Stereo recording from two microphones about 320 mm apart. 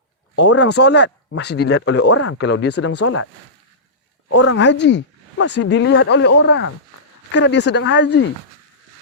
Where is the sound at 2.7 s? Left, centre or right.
Left.